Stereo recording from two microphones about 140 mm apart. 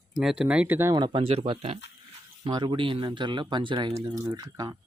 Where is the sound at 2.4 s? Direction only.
35° right (ahead or behind).